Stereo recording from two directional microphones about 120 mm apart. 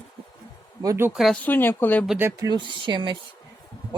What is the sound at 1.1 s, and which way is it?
Speech, centre (ahead or behind).